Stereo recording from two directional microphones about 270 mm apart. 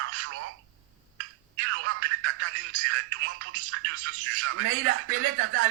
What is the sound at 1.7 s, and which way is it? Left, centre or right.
Music, right.